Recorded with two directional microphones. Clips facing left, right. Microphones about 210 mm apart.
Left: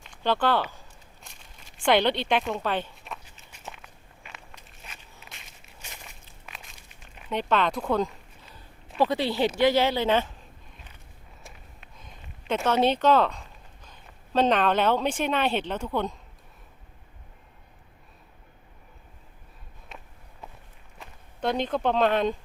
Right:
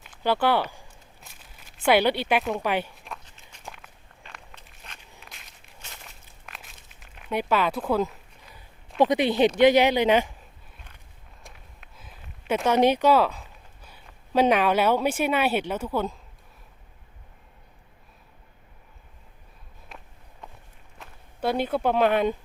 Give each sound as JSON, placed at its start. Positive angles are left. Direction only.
{"t": 0.0, "sound": "a sound", "side_deg": -5}
{"t": 2.6, "sound": "speech", "side_deg": -10}
{"t": 3.0, "sound": "walk", "side_deg": 5}
{"t": 6.1, "sound": "a sound", "side_deg": 0}
{"t": 9.0, "sound": "speech", "side_deg": -15}
{"t": 11.4, "sound": "a sound", "side_deg": -5}
{"t": 13.8, "sound": "speech", "side_deg": -10}
{"t": 19.9, "sound": "walk", "side_deg": 0}
{"t": 21.0, "sound": "speech", "side_deg": -5}